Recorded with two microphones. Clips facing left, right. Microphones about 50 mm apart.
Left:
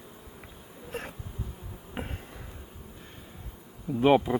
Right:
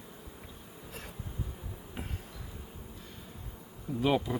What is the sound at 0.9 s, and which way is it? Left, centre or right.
Insect, left.